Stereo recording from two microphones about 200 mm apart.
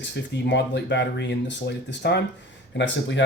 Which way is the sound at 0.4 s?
60° left (ahead or behind).